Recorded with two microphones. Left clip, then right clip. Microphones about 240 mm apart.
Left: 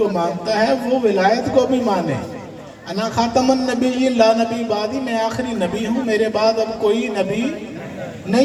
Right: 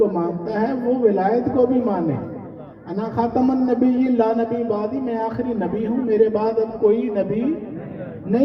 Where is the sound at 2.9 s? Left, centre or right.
Left.